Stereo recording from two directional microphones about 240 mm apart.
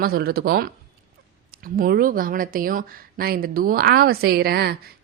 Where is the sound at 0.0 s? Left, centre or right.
Right.